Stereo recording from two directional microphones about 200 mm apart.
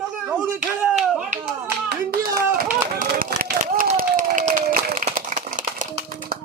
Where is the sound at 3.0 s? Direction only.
45° right (ahead or behind).